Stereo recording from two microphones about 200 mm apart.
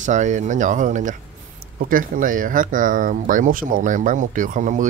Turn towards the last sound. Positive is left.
turn(degrees=-40)  # may be behind; listen again after turning